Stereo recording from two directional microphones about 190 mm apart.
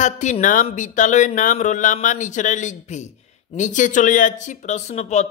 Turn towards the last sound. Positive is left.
turn(degrees=35)  # may be behind; listen again after turning